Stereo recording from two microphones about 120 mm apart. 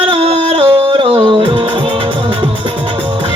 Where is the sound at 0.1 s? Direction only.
55° right (ahead or behind).